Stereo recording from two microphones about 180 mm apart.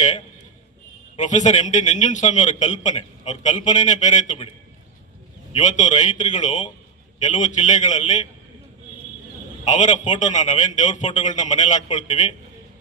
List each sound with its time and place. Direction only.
1.1 s a man's voice: 40° left (ahead or behind)
5.5 s a man's voice: 40° left (ahead or behind)
9.7 s a man's voice: 45° left (ahead or behind)